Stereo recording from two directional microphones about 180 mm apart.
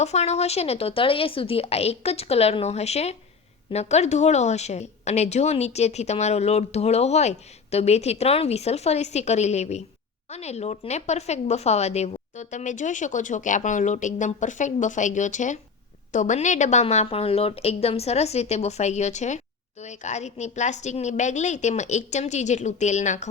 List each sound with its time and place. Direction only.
0.0 s a woman's voice: 35° left (ahead or behind)